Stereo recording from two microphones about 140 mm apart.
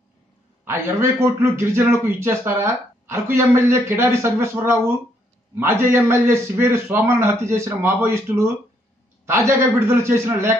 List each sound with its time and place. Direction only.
0.7 s a man's voice: 15° right (ahead or behind)
9.8 s a man's voice: 20° right (ahead or behind)